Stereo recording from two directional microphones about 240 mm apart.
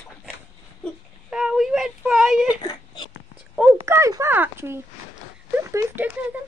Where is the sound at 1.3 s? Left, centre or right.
Centre.